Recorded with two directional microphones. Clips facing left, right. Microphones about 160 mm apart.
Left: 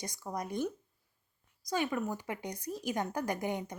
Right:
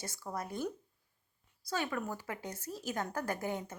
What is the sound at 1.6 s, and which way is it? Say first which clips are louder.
Speech: left 3 dB; 15° left (ahead or behind).